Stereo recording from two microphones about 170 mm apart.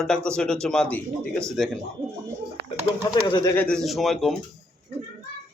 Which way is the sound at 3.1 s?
25° left (ahead or behind).